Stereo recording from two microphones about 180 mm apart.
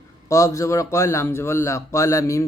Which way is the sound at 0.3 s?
15° left (ahead or behind).